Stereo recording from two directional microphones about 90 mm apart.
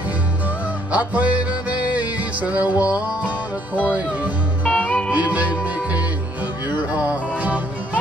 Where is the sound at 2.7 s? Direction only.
40° left (ahead or behind).